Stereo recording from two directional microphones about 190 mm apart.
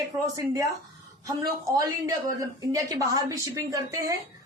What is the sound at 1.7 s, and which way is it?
Speech, 20° right (ahead or behind).